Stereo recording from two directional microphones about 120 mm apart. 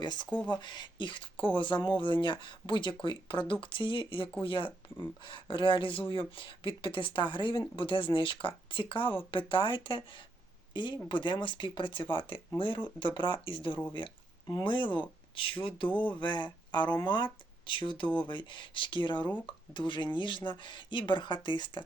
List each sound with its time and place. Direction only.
0.0 s speech: 40° left (ahead or behind)